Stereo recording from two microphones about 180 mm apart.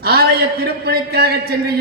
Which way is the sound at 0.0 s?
60° right (ahead or behind).